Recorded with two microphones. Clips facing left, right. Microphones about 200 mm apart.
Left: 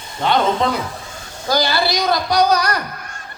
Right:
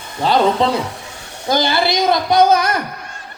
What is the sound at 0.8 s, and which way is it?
Snake, 70° right (ahead or behind).